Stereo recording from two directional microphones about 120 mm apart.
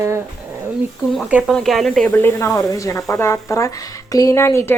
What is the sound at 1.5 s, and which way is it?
Speech, centre (ahead or behind).